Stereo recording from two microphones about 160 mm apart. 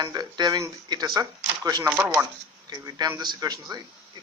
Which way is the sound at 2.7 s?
25° right (ahead or behind).